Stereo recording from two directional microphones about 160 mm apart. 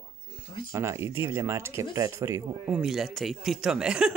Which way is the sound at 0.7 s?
20° right (ahead or behind).